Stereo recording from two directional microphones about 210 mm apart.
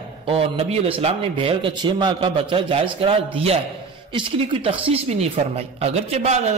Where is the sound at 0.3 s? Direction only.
30° right (ahead or behind).